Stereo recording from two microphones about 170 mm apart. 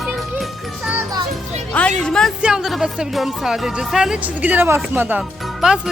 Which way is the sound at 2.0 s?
5° left (ahead or behind).